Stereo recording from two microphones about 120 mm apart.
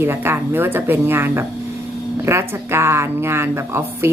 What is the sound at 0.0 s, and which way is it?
A woman's voice, 20° right (ahead or behind).